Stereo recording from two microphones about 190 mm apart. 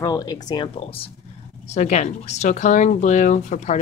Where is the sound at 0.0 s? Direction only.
20° left (ahead or behind).